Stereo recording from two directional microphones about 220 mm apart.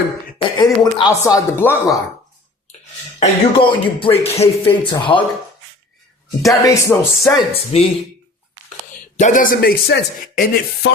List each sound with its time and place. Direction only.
0.3 s speech: 20° left (ahead or behind)
3.2 s speech: 25° left (ahead or behind)
6.5 s speech: 15° left (ahead or behind)
7.5 s speech: 30° left (ahead or behind)
9.1 s speech: 35° left (ahead or behind)